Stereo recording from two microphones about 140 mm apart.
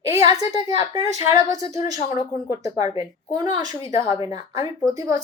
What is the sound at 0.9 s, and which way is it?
A woman's voice, 25° right (ahead or behind).